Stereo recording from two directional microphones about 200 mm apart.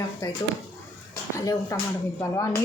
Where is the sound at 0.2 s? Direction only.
15° left (ahead or behind).